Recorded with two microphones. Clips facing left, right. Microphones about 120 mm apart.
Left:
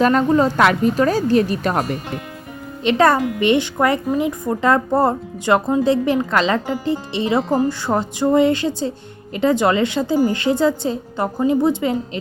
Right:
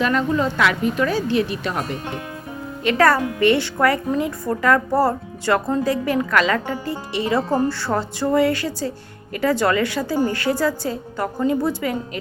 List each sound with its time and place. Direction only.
0.0 s a woman's voice: 40° left (ahead or behind)
2.8 s speech: 20° left (ahead or behind)